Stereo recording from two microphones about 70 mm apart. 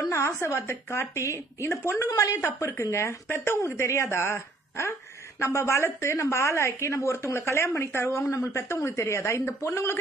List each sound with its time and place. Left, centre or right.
0.1 s a woman's voice: left
2.0 s a woman's voice: left